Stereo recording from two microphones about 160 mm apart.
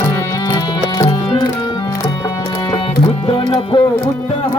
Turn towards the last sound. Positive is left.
turn(degrees=30)  # may be behind; listen again after turning